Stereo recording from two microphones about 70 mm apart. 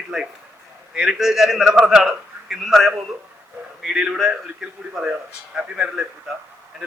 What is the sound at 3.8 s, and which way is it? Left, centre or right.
A man's voice, centre.